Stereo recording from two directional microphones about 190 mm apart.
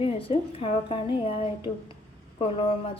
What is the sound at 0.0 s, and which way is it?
A woman's voice, 30° left (ahead or behind).